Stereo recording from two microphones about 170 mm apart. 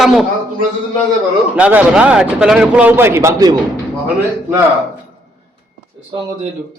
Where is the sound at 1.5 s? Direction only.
10° right (ahead or behind).